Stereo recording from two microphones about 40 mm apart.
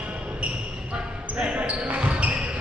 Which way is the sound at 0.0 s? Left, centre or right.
Right.